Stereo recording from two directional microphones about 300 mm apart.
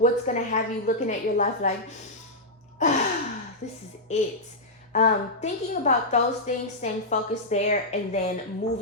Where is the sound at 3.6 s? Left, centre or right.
Left.